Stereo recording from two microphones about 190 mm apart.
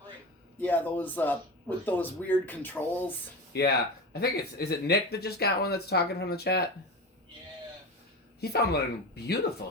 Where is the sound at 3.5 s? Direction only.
60° left (ahead or behind).